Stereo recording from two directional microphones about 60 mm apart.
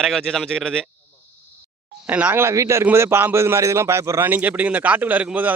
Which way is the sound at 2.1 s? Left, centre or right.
Right.